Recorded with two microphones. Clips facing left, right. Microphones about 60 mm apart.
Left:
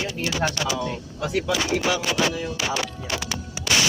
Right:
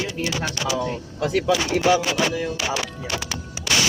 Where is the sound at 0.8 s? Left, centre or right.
Right.